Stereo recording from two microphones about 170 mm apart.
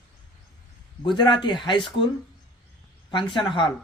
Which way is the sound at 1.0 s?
25° left (ahead or behind).